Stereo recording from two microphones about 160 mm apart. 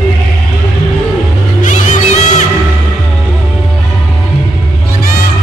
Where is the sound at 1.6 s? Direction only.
50° left (ahead or behind).